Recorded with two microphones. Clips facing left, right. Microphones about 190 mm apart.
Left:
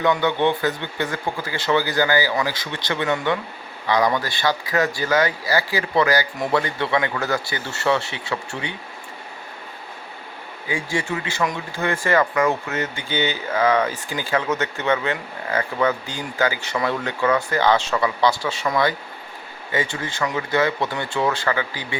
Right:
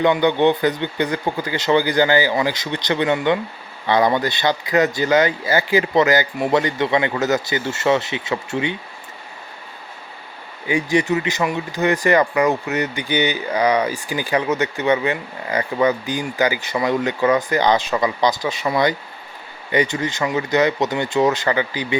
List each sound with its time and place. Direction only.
0.0 s speech: 20° right (ahead or behind)
10.7 s speech: 20° right (ahead or behind)